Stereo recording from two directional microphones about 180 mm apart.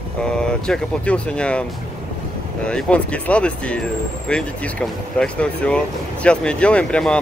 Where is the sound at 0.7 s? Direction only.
5° left (ahead or behind).